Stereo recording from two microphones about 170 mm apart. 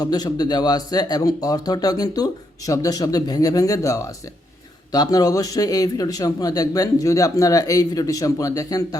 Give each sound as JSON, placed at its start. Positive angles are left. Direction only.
{"t": 0.0, "sound": "speech", "side_deg": 25}